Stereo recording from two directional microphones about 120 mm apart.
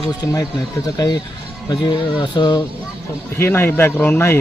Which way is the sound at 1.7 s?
40° left (ahead or behind).